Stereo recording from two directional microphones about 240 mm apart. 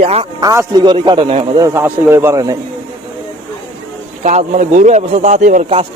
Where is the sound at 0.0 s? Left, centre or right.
Right.